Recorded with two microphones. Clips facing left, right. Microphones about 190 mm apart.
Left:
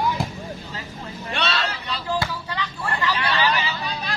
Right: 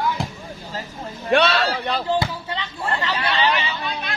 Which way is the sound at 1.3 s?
55° right (ahead or behind).